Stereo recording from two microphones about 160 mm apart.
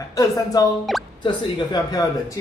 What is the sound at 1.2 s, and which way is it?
Speech, 25° left (ahead or behind).